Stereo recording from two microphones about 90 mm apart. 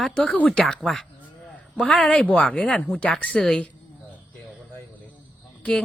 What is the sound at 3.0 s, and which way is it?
Speech, 15° left (ahead or behind).